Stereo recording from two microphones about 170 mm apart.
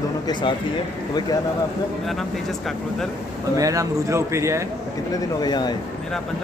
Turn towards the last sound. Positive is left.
turn(degrees=25)  # may be behind; listen again after turning